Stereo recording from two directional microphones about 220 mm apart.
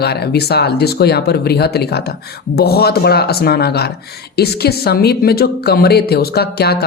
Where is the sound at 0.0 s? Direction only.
45° left (ahead or behind).